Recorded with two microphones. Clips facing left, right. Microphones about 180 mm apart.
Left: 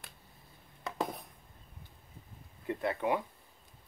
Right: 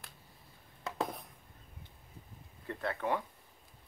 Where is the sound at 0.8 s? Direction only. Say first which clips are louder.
Left 1 dB; centre (ahead or behind).